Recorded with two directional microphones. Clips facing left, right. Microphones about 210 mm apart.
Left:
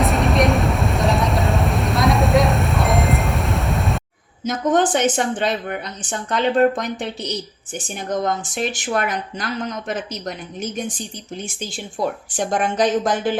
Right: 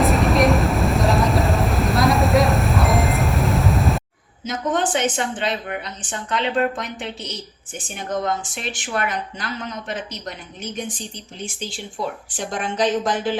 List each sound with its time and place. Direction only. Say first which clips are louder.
0.0 s vehicle: right 1 dB; centre (ahead or behind)
4.4 s a woman's voice: left 5 dB; 45° left (ahead or behind)
12.4 s a woman's voice: left 4 dB; 45° left (ahead or behind)